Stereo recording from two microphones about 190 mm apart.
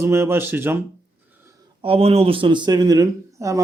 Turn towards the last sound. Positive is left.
turn(degrees=-15)  # may be behind; listen again after turning